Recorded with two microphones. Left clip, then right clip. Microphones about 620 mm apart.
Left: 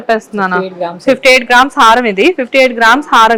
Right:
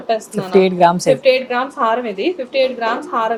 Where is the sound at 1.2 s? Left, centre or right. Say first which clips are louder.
Left 8 dB; left.